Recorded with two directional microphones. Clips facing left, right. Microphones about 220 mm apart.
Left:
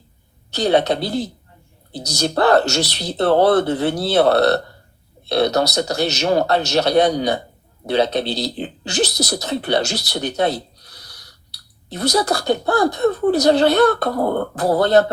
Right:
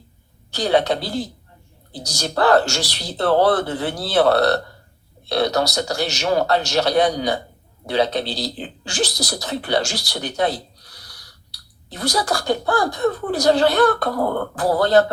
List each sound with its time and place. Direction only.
0.5 s speech: 20° left (ahead or behind)
11.9 s speech: 20° left (ahead or behind)